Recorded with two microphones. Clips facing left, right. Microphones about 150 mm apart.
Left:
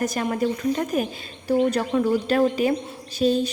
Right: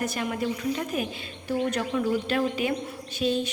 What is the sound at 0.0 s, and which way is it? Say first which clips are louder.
A woman's voice: left 5 dB; 40° left (ahead or behind).